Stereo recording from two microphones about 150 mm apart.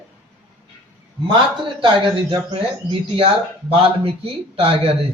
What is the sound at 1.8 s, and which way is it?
Speech, 35° right (ahead or behind).